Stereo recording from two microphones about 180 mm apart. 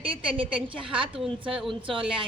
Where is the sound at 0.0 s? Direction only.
30° right (ahead or behind).